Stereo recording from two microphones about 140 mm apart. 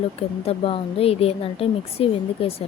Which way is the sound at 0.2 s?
45° left (ahead or behind).